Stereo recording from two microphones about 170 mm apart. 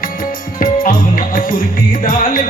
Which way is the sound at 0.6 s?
55° left (ahead or behind).